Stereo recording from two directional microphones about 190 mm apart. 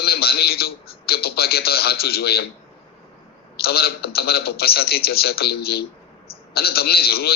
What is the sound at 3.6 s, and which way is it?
A man's voice, 55° left (ahead or behind).